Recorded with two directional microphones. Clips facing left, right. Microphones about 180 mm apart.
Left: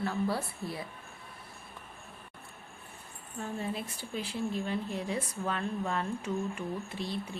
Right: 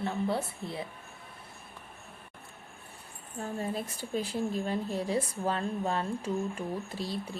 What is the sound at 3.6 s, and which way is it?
Speech, 40° right (ahead or behind).